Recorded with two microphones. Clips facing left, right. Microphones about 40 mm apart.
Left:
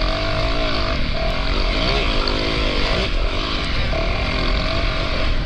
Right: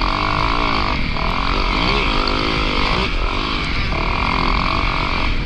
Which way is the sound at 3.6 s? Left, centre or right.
Right.